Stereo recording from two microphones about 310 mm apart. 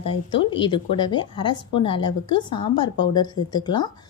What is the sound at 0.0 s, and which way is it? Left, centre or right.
Speech, centre.